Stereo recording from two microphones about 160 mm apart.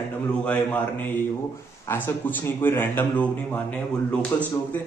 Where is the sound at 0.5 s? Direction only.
10° left (ahead or behind).